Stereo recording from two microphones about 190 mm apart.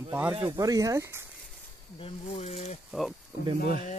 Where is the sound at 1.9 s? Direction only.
30° left (ahead or behind).